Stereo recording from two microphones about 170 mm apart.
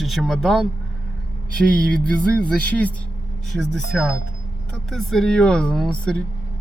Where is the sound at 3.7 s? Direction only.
Centre (ahead or behind).